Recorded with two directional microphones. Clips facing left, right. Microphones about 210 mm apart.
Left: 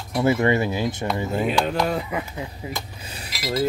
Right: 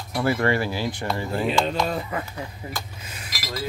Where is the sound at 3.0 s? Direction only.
35° left (ahead or behind).